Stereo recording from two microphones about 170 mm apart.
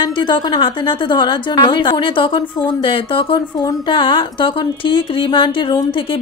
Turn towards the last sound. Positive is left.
turn(degrees=30)  # may be behind; listen again after turning